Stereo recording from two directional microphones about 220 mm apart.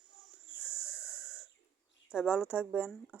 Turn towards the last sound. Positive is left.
turn(degrees=-5)  # may be behind; listen again after turning